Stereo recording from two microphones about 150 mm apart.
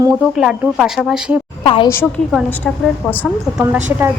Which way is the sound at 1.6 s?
35° left (ahead or behind).